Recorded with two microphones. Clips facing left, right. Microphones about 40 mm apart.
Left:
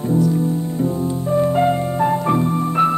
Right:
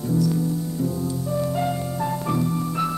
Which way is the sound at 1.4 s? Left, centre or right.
Left.